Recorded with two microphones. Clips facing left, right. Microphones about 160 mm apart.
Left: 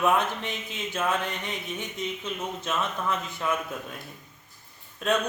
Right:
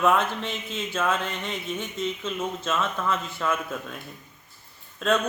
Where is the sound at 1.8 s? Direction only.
15° left (ahead or behind).